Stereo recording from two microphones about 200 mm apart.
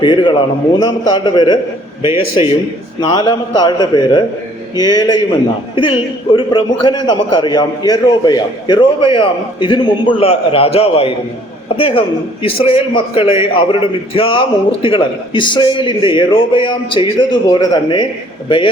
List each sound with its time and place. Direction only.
0.0 s a man's voice: 25° left (ahead or behind)